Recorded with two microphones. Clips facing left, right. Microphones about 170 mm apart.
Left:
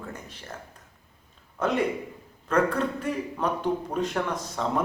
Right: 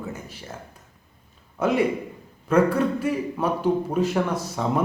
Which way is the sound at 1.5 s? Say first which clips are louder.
Right 4 dB; 10° right (ahead or behind).